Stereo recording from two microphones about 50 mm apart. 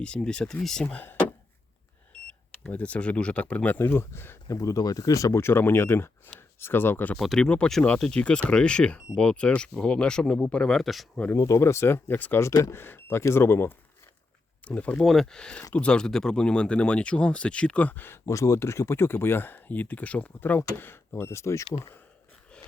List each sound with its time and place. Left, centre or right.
0.0 s speech: centre
2.7 s speech: left
3.8 s speech: left
4.4 s speech: left
5.3 s speech: left
7.3 s speech: centre
10.7 s speech: centre
11.3 s speech: left
12.0 s speech: left
14.6 s speech: left
15.0 s speech: centre
15.4 s speech: left
18.3 s speech: left
20.6 s speech: left